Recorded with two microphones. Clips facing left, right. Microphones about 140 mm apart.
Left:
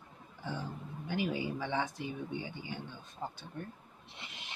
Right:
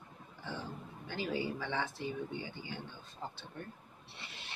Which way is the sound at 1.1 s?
15° left (ahead or behind).